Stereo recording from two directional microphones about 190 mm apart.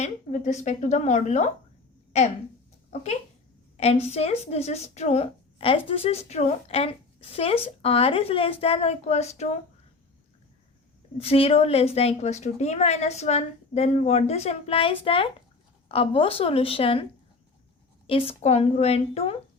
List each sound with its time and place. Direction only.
0.0 s a woman's voice: 40° left (ahead or behind)
2.9 s a woman's voice: 35° left (ahead or behind)
11.2 s a woman's voice: 30° left (ahead or behind)